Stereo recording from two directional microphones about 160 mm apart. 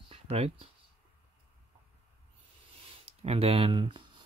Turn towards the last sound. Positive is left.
turn(degrees=-30)  # may be behind; listen again after turning